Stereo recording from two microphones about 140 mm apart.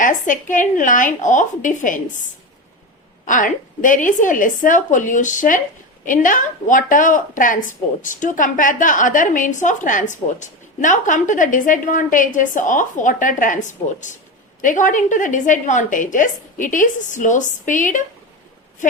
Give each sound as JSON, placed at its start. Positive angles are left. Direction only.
{"t": 0.0, "sound": "a woman's voice", "side_deg": 70}
{"t": 3.2, "sound": "a woman's voice", "side_deg": 70}